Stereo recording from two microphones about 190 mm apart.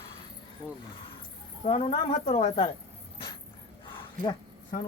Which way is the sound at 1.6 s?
30° left (ahead or behind).